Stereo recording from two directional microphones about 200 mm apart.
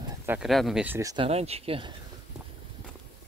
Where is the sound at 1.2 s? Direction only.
30° right (ahead or behind).